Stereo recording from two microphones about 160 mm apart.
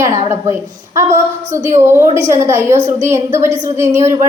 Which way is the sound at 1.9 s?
15° right (ahead or behind).